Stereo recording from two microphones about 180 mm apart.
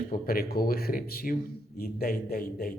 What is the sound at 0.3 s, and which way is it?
A man's voice, 55° left (ahead or behind).